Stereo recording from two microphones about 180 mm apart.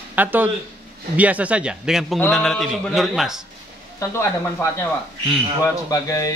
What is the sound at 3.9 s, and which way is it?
A man's voice, 15° left (ahead or behind).